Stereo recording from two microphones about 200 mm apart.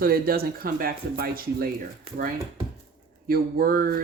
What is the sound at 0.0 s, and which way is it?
Speech, 50° right (ahead or behind).